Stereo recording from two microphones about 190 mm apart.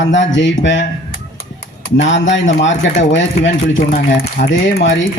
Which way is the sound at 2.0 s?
75° left (ahead or behind).